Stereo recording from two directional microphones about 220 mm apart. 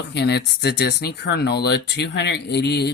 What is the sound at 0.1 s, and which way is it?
Speech, 50° left (ahead or behind).